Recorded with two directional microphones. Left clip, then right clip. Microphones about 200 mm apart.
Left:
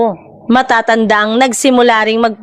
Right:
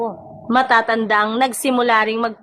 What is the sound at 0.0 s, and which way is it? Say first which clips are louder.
A woman's voice: left 10 dB; 40° left (ahead or behind).